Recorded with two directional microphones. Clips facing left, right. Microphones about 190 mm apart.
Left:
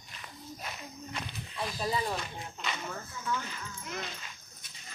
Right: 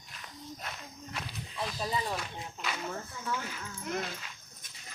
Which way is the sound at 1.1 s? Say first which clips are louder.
Right 1 dB; centre (ahead or behind).